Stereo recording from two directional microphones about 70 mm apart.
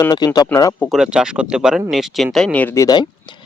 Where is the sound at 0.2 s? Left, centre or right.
Left.